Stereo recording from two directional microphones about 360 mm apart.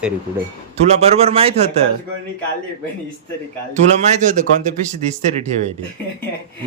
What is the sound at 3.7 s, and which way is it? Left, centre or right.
Speech, centre.